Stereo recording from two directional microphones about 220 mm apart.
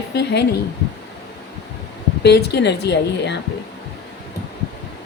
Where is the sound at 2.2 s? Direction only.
50° left (ahead or behind).